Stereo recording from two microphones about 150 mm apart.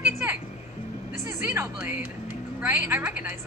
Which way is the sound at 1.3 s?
15° right (ahead or behind).